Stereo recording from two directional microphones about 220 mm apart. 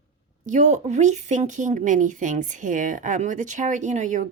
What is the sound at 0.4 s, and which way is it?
Speech, 35° right (ahead or behind).